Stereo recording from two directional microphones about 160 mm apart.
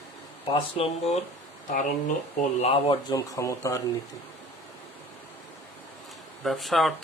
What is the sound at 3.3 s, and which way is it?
Speech, 20° left (ahead or behind).